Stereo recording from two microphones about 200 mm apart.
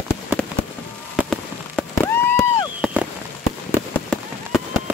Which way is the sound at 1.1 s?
Centre (ahead or behind).